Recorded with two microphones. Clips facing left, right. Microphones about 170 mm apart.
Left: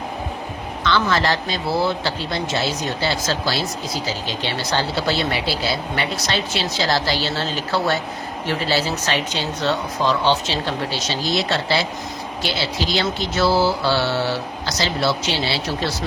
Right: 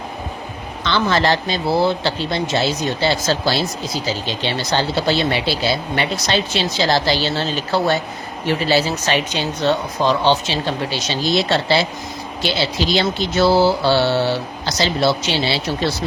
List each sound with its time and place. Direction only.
0.9 s speech: 25° right (ahead or behind)